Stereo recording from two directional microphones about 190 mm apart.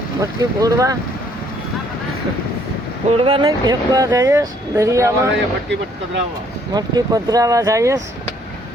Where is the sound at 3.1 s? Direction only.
30° right (ahead or behind).